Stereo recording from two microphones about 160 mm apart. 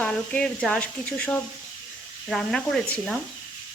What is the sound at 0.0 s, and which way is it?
Speech, 5° left (ahead or behind).